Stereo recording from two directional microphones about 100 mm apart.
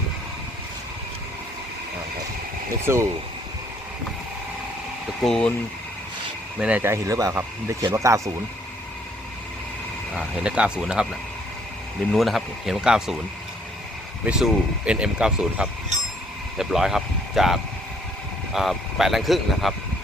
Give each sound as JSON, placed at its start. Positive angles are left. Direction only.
{"t": 2.8, "sound": "speech", "side_deg": -25}
{"t": 5.2, "sound": "speech", "side_deg": 5}
{"t": 6.6, "sound": "speech", "side_deg": -15}
{"t": 6.8, "sound": "speech", "side_deg": -30}
{"t": 10.2, "sound": "speech", "side_deg": -10}
{"t": 12.1, "sound": "speech", "side_deg": 0}
{"t": 14.3, "sound": "speech", "side_deg": -10}